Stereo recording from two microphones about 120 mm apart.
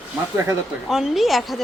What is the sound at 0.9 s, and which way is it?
Speech, 5° right (ahead or behind).